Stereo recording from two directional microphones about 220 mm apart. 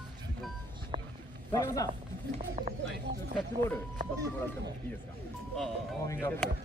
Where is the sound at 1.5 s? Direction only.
15° left (ahead or behind).